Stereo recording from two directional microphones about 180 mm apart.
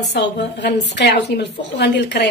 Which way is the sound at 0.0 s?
70° left (ahead or behind).